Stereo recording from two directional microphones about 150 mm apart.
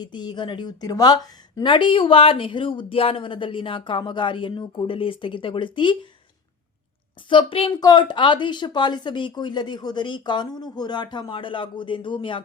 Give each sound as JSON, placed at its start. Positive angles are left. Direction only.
{"t": 0.0, "sound": "a woman's voice", "side_deg": 30}
{"t": 7.3, "sound": "a woman's voice", "side_deg": 35}